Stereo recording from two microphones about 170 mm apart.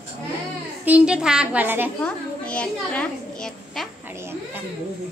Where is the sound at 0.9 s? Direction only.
5° right (ahead or behind).